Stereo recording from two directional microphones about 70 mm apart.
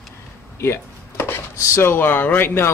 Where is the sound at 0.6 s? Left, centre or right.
Left.